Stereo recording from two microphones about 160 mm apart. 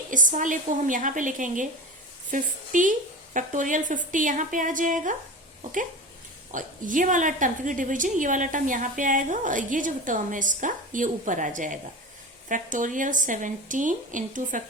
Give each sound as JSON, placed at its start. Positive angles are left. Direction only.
{"t": 0.1, "sound": "a woman's voice", "side_deg": -55}
{"t": 6.5, "sound": "a woman's voice", "side_deg": -55}